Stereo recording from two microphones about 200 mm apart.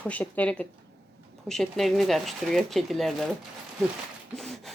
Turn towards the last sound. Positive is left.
turn(degrees=0)  # may be behind; listen again after turning